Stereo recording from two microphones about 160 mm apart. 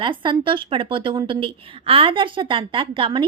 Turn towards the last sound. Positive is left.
turn(degrees=-30)  # may be behind; listen again after turning